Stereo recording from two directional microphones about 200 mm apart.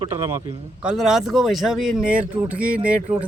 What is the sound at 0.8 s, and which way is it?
Speech, 5° right (ahead or behind).